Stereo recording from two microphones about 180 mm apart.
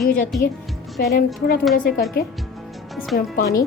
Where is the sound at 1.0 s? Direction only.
55° left (ahead or behind).